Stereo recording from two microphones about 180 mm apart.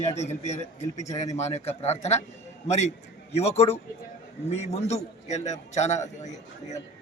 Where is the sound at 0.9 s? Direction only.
20° left (ahead or behind).